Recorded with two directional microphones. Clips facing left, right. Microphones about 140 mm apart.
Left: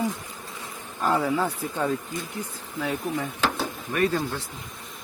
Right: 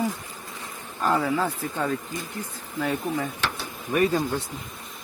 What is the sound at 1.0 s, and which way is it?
Speech, 10° left (ahead or behind).